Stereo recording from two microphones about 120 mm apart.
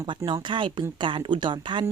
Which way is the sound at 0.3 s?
40° right (ahead or behind).